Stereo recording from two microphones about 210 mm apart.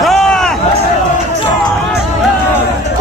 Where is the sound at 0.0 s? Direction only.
Centre (ahead or behind).